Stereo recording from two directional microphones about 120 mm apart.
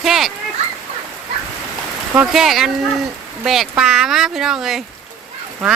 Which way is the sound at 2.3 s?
Centre (ahead or behind).